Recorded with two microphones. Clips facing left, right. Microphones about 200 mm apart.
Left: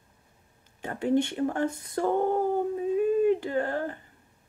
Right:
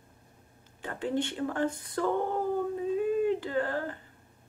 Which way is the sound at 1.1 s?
10° left (ahead or behind).